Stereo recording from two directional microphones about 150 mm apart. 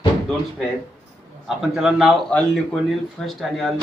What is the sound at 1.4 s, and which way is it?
Speech, 5° right (ahead or behind).